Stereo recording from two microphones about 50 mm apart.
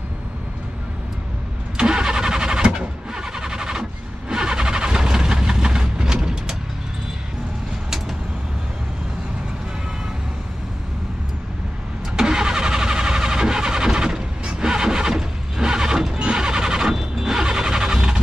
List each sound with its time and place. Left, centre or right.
1.8 s vehicle: centre
12.2 s vehicle: centre